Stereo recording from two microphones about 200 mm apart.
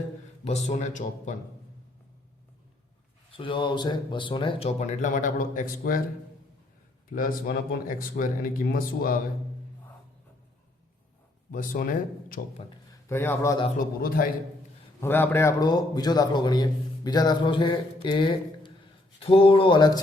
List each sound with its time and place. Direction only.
0.4 s a man's voice: 35° left (ahead or behind)
3.3 s a man's voice: 25° left (ahead or behind); by 6.0 s 45° left (ahead or behind)
7.1 s speech: 45° left (ahead or behind)
11.5 s speech: 45° left (ahead or behind)
13.1 s speech: 10° left (ahead or behind)
13.7 s speech: 45° left (ahead or behind)
15.0 s a man's voice: 10° left (ahead or behind)